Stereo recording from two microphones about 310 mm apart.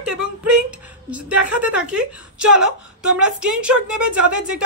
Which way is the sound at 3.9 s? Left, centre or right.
Right.